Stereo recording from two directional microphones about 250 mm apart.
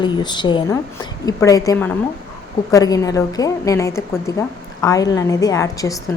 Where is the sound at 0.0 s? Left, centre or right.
Centre.